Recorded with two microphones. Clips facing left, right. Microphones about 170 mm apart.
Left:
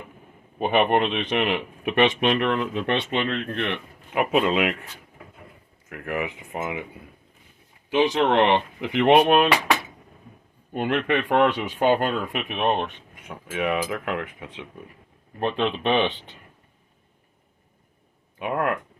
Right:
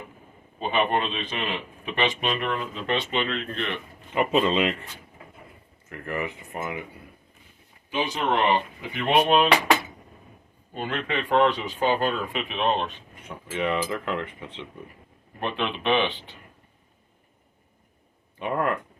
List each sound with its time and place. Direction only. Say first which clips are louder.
0.6 s speech: left 4 dB; 60° left (ahead or behind)
4.1 s speech: left 1 dB; 10° left (ahead or behind)
5.9 s speech: left 2 dB; 10° left (ahead or behind)
7.9 s speech: left 6 dB; 90° left
10.8 s speech: left 6 dB; 65° left (ahead or behind)
13.2 s speech: left 1 dB; 10° left (ahead or behind)
15.4 s speech: left 4 dB; 40° left (ahead or behind)
18.3 s speech: left 1 dB; 10° left (ahead or behind)